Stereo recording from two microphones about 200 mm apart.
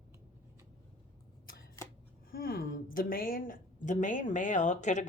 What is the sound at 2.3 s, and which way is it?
A woman's voice, 45° left (ahead or behind).